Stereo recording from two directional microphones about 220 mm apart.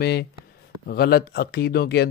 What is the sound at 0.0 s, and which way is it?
Speech, 45° left (ahead or behind).